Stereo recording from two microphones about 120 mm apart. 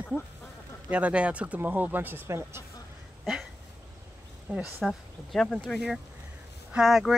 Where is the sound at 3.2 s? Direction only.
5° right (ahead or behind).